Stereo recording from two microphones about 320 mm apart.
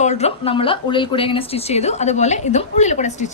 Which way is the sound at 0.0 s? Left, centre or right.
Left.